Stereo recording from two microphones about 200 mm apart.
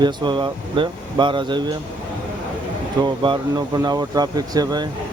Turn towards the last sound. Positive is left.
turn(degrees=-20)  # may be behind; listen again after turning